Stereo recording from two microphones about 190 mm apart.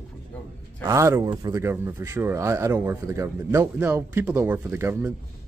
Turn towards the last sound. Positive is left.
turn(degrees=-10)  # may be behind; listen again after turning